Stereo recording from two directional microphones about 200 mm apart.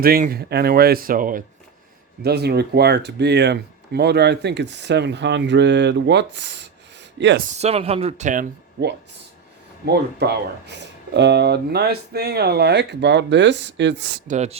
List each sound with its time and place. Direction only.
0.0 s speech: 50° right (ahead or behind)
2.2 s speech: 55° right (ahead or behind)
7.5 s speech: 30° right (ahead or behind)
9.8 s speech: 55° right (ahead or behind)
14.3 s speech: 35° right (ahead or behind)